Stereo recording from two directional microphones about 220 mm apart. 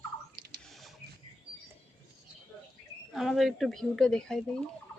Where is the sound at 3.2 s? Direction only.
Centre (ahead or behind).